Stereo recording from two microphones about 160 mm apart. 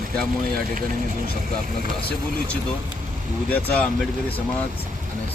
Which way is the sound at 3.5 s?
10° left (ahead or behind).